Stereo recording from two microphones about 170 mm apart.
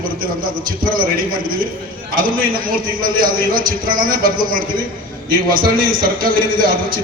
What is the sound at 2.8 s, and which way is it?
A man's voice, 55° right (ahead or behind).